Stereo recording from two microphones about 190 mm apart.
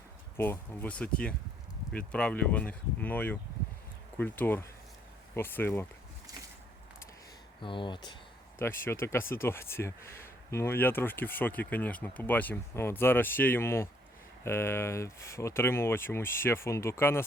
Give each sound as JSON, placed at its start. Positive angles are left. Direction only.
{"t": 0.3, "sound": "speech", "side_deg": 10}
{"t": 7.6, "sound": "speech", "side_deg": 25}
{"t": 8.5, "sound": "speech", "side_deg": 15}